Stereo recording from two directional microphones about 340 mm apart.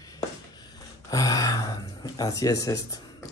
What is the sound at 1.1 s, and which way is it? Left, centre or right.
Speech, centre.